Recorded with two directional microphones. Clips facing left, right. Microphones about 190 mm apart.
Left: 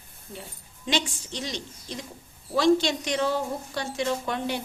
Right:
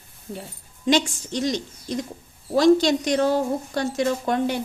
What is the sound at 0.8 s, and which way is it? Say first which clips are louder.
A woman's voice: right 8 dB; 45° right (ahead or behind).